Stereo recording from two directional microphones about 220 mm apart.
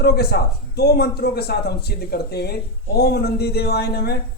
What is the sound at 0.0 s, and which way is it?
Speech, 45° left (ahead or behind).